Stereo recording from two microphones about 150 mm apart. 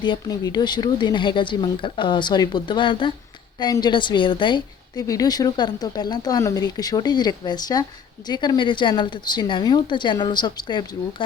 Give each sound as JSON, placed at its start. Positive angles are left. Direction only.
{"t": 0.0, "sound": "a woman's voice", "side_deg": 30}